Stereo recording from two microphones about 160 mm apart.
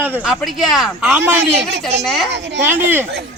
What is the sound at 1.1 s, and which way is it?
Speech, 15° right (ahead or behind).